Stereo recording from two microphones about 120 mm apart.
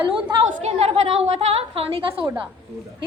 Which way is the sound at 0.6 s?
55° right (ahead or behind).